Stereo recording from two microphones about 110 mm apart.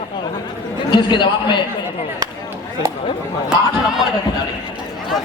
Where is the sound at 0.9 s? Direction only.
45° left (ahead or behind).